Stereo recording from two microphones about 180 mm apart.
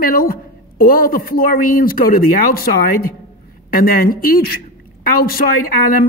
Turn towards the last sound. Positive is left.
turn(degrees=55)  # may be behind; listen again after turning